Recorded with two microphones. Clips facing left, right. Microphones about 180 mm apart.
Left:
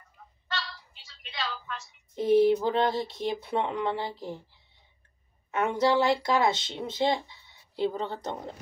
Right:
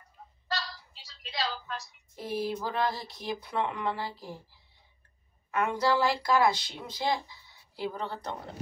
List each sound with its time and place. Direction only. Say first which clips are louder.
0.5 s a sound: right 1 dB; 35° right (ahead or behind)
2.1 s speech: left 12 dB; 20° left (ahead or behind)
5.5 s speech: left 3 dB; 25° left (ahead or behind)